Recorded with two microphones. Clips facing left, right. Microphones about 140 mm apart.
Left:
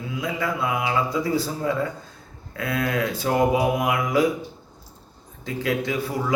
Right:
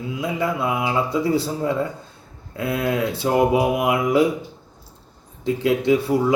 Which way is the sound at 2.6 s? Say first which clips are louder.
Right 3 dB; 25° right (ahead or behind).